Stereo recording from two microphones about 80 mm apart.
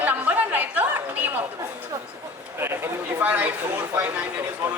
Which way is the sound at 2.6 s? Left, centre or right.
Right.